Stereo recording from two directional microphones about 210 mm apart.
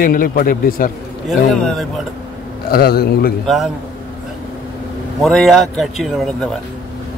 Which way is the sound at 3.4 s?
Centre (ahead or behind).